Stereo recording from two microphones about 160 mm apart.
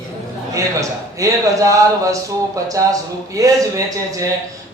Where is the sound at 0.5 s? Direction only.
20° right (ahead or behind).